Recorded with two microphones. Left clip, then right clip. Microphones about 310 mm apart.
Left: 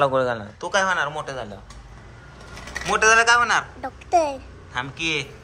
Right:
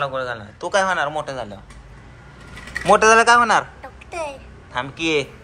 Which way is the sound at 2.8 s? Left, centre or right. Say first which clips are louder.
Right 4 dB; centre.